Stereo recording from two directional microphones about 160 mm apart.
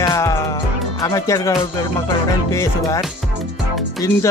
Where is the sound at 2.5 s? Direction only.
20° left (ahead or behind).